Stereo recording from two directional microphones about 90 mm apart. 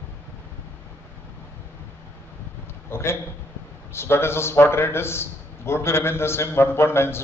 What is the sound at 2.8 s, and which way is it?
A man's voice, 30° left (ahead or behind).